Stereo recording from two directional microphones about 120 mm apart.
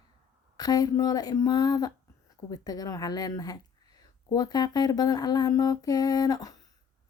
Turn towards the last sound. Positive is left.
turn(degrees=30)  # may be behind; listen again after turning